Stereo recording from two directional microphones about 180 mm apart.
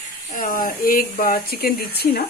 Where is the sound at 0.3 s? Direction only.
50° left (ahead or behind).